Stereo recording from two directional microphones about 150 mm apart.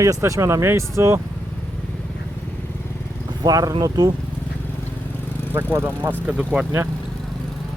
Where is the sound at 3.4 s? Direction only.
25° right (ahead or behind).